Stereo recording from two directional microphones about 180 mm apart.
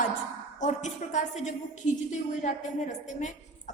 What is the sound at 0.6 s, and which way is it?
Speech, 40° left (ahead or behind).